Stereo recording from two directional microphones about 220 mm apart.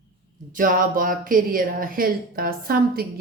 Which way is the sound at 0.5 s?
40° right (ahead or behind).